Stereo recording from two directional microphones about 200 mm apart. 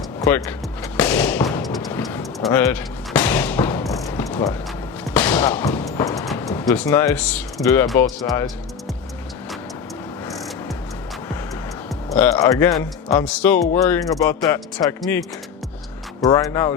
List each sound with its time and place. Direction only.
0.2 s speech: 10° left (ahead or behind)
0.9 s thump: 10° left (ahead or behind)
1.5 s music: 15° left (ahead or behind)
2.5 s a sound: 10° left (ahead or behind)
5.1 s music: 10° left (ahead or behind)
6.4 s speech: 15° left (ahead or behind)
12.0 s speech: 10° left (ahead or behind)
16.2 s speech: 15° left (ahead or behind)